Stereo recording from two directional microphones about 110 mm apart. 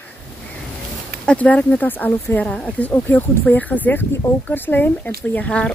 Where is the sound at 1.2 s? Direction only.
10° left (ahead or behind).